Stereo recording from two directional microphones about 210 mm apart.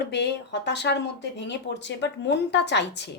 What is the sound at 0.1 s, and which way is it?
A woman's voice, 55° left (ahead or behind).